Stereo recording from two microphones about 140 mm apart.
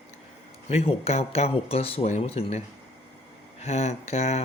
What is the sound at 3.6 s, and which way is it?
Speech, 50° left (ahead or behind).